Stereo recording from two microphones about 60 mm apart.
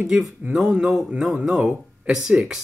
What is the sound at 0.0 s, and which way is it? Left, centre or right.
Speech, centre.